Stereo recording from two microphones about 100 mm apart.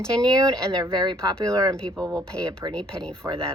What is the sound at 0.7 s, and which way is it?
Speech, 40° right (ahead or behind).